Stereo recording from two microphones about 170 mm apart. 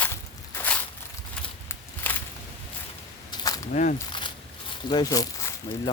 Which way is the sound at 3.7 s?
45° left (ahead or behind).